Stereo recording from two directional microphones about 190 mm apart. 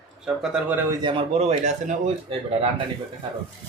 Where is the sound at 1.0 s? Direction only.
25° right (ahead or behind).